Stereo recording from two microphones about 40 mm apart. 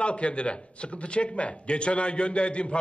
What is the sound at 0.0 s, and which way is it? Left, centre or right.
A man's voice, left.